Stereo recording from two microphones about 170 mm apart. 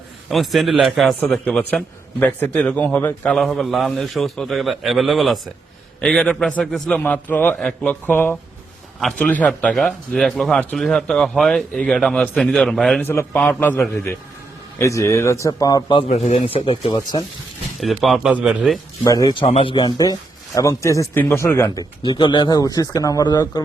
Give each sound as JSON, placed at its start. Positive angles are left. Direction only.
{"t": 0.3, "sound": "a man's voice", "side_deg": 0}
{"t": 16.0, "sound": "speech", "side_deg": 40}
{"t": 17.7, "sound": "a man's voice", "side_deg": 0}
{"t": 19.0, "sound": "speech", "side_deg": 20}
{"t": 19.7, "sound": "a man's voice", "side_deg": 25}
{"t": 22.0, "sound": "speech", "side_deg": 30}